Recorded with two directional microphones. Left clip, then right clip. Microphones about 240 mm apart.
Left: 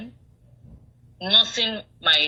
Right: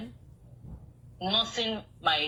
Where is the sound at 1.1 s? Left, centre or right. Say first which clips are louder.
Left 9 dB; left.